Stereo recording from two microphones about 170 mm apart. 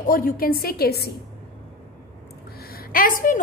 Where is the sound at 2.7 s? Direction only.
55° left (ahead or behind).